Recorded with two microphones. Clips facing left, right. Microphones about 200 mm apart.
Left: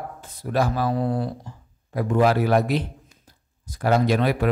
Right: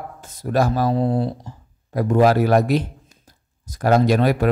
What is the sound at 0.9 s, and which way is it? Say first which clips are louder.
Speech: right 4 dB; 25° right (ahead or behind).